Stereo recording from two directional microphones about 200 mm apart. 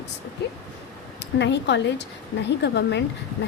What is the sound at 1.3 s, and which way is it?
Speech, 60° left (ahead or behind).